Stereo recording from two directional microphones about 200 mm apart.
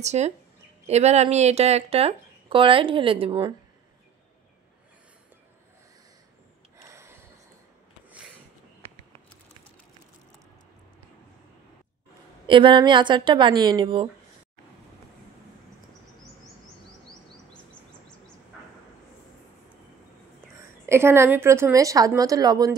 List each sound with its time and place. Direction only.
0.0 s speech: 35° right (ahead or behind)
6.8 s a sound: 15° right (ahead or behind)
12.4 s speech: 25° right (ahead or behind)
20.8 s a woman's voice: 10° right (ahead or behind)